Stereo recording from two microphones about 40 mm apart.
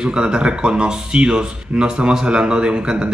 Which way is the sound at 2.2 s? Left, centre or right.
Right.